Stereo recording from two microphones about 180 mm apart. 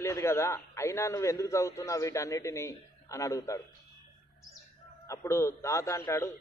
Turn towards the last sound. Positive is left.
turn(degrees=15)  # may be behind; listen again after turning